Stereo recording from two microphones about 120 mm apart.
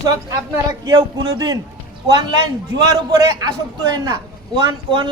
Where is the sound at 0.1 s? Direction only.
30° right (ahead or behind).